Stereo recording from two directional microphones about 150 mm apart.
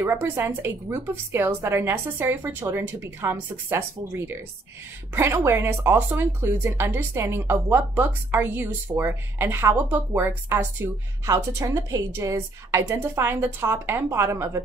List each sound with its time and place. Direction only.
0.0 s speech: 15° right (ahead or behind)
5.1 s speech: 15° right (ahead or behind)
11.3 s speech: 30° right (ahead or behind)